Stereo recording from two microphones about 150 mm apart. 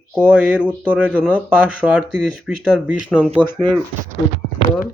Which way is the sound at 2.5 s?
5° right (ahead or behind).